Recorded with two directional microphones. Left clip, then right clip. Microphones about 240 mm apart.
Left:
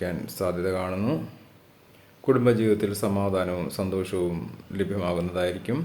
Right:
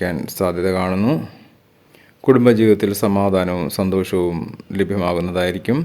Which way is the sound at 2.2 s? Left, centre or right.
Right.